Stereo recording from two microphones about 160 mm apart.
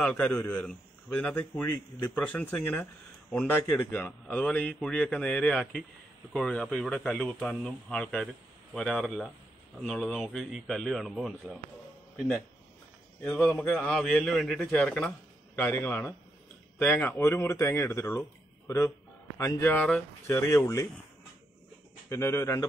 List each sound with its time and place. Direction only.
0.0 s a man's voice: 5° left (ahead or behind)
13.2 s a man's voice: 10° left (ahead or behind)
19.3 s a man's voice: 15° left (ahead or behind)
22.1 s a man's voice: 15° left (ahead or behind)